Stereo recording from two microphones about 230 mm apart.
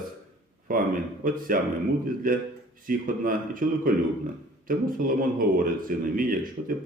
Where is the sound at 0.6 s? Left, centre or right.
Right.